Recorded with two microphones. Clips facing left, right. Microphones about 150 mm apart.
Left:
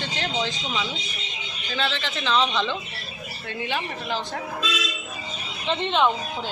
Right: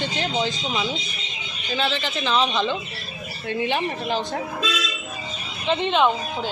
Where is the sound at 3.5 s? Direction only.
20° right (ahead or behind).